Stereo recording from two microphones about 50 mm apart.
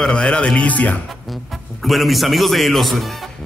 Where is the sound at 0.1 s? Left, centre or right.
Left.